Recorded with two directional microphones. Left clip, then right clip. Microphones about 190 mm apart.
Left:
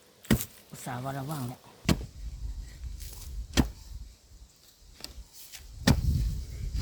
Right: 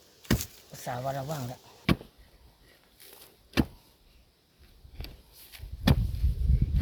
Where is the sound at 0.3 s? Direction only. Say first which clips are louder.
Left 1 dB; 5° left (ahead or behind).